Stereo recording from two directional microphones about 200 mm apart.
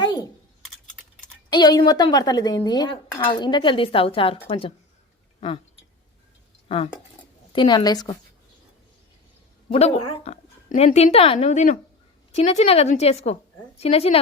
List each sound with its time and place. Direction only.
0.0 s typing: 20° left (ahead or behind)
1.5 s speech: 20° left (ahead or behind)
6.7 s speech: 30° left (ahead or behind)
9.6 s a woman's voice: 30° left (ahead or behind)